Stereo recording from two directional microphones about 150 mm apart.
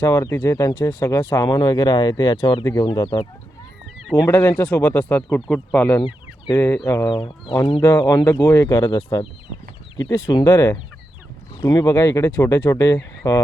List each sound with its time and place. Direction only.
0.0 s speech: 20° left (ahead or behind)
4.3 s speech: 20° left (ahead or behind)
6.8 s speech: 20° left (ahead or behind)
7.1 s speech: 35° left (ahead or behind)
7.8 s speech: 15° left (ahead or behind)